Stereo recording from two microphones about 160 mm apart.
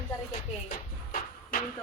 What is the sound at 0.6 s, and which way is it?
Music, 65° left (ahead or behind).